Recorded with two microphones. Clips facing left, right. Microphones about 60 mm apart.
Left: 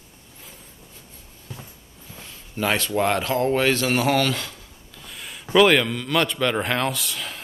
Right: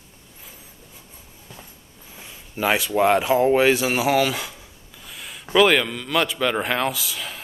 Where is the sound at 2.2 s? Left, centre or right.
Centre.